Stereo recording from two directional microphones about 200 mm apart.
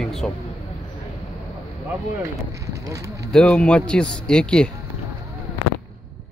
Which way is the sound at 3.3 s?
5° left (ahead or behind).